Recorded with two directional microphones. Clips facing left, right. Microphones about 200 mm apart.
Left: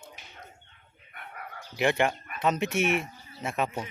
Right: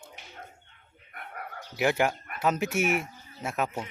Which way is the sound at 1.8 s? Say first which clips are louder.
Even; 5° right (ahead or behind).